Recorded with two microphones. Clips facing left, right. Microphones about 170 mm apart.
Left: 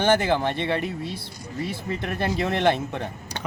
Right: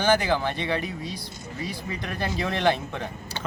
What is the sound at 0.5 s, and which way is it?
Speech, 60° left (ahead or behind).